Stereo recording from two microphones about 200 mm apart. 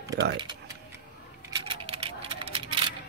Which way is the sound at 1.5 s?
25° right (ahead or behind).